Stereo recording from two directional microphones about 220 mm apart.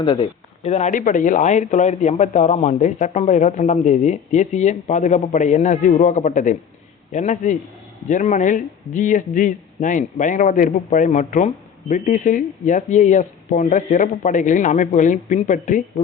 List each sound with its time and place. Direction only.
0.0 s a man's voice: 25° left (ahead or behind)